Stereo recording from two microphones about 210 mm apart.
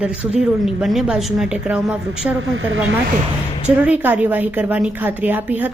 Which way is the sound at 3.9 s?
10° right (ahead or behind).